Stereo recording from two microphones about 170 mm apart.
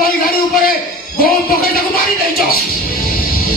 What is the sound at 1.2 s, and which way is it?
Music, 60° left (ahead or behind).